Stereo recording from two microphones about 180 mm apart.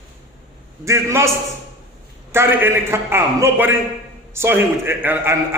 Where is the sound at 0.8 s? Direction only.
15° right (ahead or behind).